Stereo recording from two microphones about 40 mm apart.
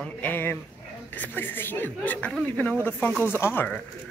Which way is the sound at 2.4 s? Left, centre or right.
Left.